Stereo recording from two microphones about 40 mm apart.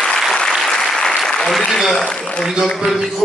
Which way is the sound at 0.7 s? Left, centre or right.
Centre.